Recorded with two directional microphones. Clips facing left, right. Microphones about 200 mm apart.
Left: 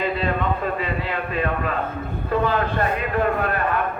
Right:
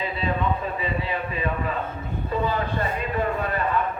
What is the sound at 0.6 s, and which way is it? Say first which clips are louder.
A man's voice: left 3 dB; 80° left.